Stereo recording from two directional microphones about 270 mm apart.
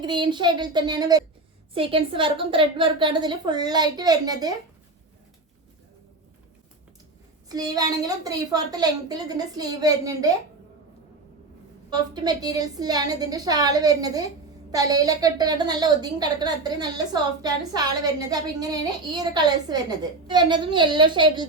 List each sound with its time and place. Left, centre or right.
0.0 s a woman's voice: centre
7.4 s a woman's voice: centre
11.9 s a woman's voice: centre